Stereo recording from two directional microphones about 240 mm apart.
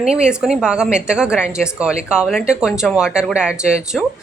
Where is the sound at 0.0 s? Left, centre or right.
Centre.